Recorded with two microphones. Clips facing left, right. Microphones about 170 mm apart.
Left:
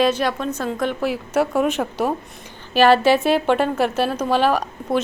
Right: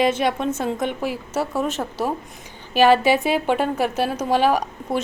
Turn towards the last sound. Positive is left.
turn(degrees=-15)  # may be behind; listen again after turning